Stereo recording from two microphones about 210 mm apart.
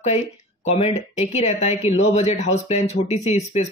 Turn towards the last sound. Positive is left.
turn(degrees=30)  # may be behind; listen again after turning